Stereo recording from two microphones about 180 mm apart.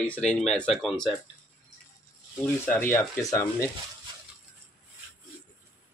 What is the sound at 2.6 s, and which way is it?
Speech, 15° left (ahead or behind).